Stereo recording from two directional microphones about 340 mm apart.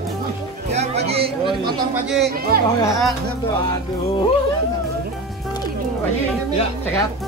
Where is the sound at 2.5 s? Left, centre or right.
Right.